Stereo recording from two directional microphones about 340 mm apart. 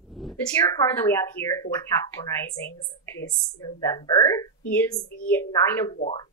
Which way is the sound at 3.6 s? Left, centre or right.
Centre.